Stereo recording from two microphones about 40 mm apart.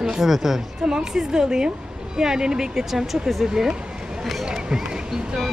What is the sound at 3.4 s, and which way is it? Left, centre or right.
Speech, centre.